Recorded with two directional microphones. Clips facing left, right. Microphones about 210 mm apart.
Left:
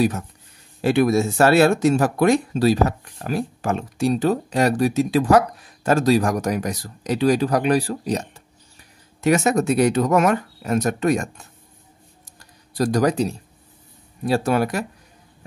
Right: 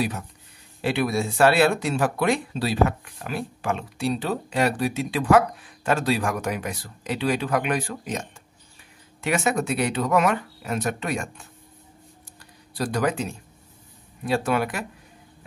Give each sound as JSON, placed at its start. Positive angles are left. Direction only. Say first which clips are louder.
{"t": 0.8, "sound": "speech", "louder": "left 7 dB", "side_deg": 45}
{"t": 12.7, "sound": "speech", "louder": "left 6 dB", "side_deg": 40}